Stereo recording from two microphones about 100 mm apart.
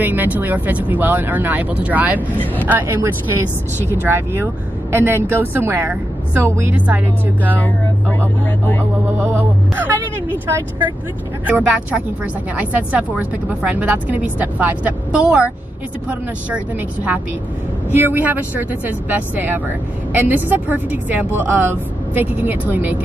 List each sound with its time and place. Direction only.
0.0 s a woman's voice: 20° right (ahead or behind)
7.5 s speech: 15° left (ahead or behind)
9.3 s a woman's voice: 20° right (ahead or behind)
11.4 s a woman's voice: 15° right (ahead or behind)